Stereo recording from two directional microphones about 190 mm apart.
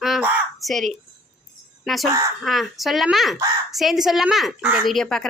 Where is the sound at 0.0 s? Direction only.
Centre (ahead or behind).